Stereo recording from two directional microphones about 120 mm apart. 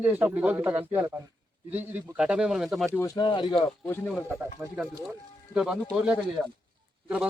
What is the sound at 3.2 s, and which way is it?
Speech, 40° left (ahead or behind).